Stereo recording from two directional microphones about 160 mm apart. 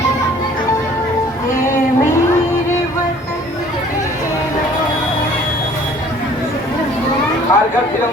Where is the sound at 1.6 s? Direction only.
15° left (ahead or behind).